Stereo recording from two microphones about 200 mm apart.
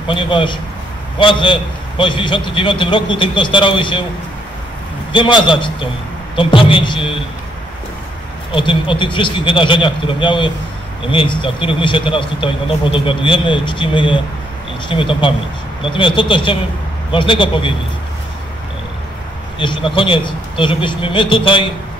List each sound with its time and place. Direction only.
0.0 s speech: 25° left (ahead or behind)
5.1 s speech: 25° left (ahead or behind)
8.5 s speech: 25° left (ahead or behind)
19.6 s speech: 25° left (ahead or behind)